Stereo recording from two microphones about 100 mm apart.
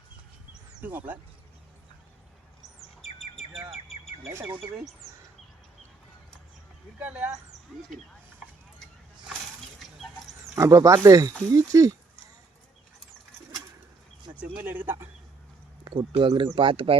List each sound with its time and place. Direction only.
0.8 s speech: 20° right (ahead or behind)
4.3 s speech: 25° right (ahead or behind)
7.0 s speech: 15° right (ahead or behind)
10.5 s speech: 35° right (ahead or behind)
14.3 s speech: 15° right (ahead or behind)
15.8 s speech: 55° right (ahead or behind)